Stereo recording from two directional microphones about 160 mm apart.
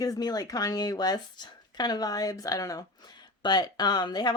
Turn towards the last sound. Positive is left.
turn(degrees=25)  # may be behind; listen again after turning